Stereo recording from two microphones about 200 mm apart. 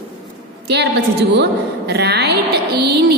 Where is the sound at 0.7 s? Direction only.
55° right (ahead or behind).